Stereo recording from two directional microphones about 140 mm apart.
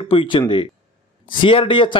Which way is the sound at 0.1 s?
35° left (ahead or behind).